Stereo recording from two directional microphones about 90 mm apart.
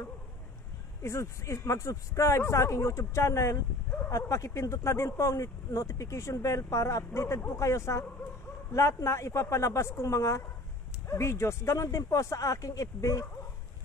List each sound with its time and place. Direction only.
1.0 s speech: 30° left (ahead or behind)